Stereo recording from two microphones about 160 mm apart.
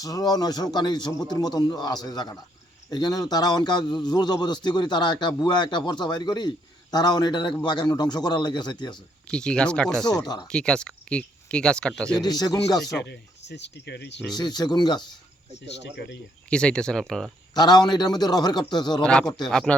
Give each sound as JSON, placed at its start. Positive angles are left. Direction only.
{"t": 0.0, "sound": "a man's voice", "side_deg": 25}
{"t": 9.3, "sound": "speech", "side_deg": 5}
{"t": 10.2, "sound": "a man's voice", "side_deg": 25}
{"t": 10.5, "sound": "speech", "side_deg": 5}
{"t": 12.1, "sound": "a man's voice", "side_deg": 25}
{"t": 13.1, "sound": "speech", "side_deg": 90}
{"t": 14.3, "sound": "a man's voice", "side_deg": 25}
{"t": 15.6, "sound": "speech", "side_deg": 90}
{"t": 16.5, "sound": "speech", "side_deg": 5}
{"t": 17.5, "sound": "a man's voice", "side_deg": 25}
{"t": 19.5, "sound": "speech", "side_deg": 5}